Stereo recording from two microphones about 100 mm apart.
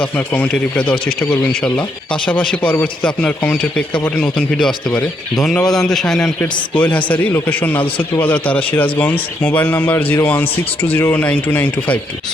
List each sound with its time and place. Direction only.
0.0 s a man's voice: 10° left (ahead or behind)
6.4 s a man's voice: 15° left (ahead or behind)